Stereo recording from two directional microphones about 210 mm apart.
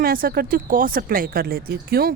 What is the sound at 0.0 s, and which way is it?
A woman's voice, 45° right (ahead or behind).